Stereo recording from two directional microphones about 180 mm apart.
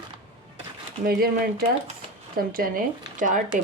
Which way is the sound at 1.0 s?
55° right (ahead or behind).